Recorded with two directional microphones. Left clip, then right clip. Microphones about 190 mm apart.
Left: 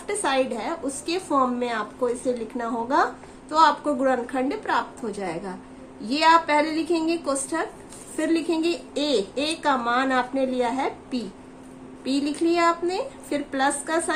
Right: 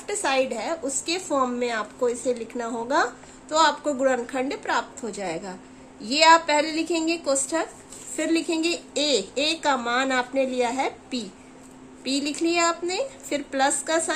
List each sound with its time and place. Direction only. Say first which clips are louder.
0.1 s a woman's voice: even; 25° right (ahead or behind)